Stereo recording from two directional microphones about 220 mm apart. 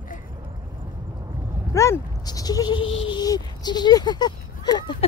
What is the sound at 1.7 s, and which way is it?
Speech, 15° left (ahead or behind).